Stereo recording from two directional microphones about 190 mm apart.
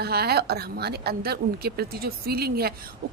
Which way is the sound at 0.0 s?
55° right (ahead or behind).